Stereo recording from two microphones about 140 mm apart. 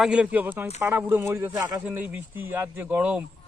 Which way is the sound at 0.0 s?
5° right (ahead or behind).